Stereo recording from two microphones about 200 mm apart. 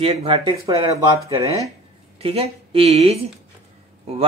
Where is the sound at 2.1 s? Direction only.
30° right (ahead or behind).